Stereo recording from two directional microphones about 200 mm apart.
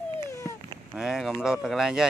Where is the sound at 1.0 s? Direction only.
Centre (ahead or behind).